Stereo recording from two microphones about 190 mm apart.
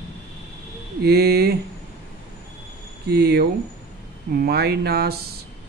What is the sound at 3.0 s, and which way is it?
Speech, 55° right (ahead or behind).